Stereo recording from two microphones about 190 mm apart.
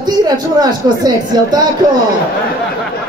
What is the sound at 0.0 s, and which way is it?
Speech, 20° right (ahead or behind).